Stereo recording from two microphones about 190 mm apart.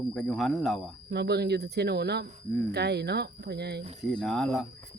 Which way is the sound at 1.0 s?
60° right (ahead or behind).